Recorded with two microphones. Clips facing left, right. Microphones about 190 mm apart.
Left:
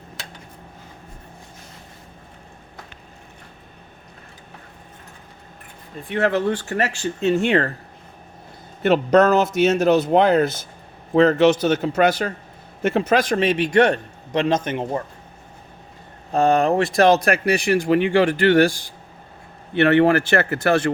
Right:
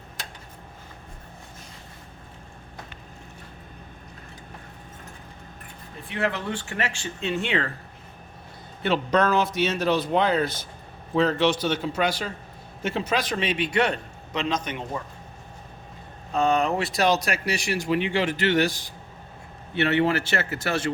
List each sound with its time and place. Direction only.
6.1 s speech: 45° left (ahead or behind)
8.8 s speech: 45° left (ahead or behind)
16.3 s speech: 45° left (ahead or behind)
19.7 s speech: 55° left (ahead or behind)